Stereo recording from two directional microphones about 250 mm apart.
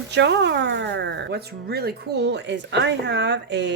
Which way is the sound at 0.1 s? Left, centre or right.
Right.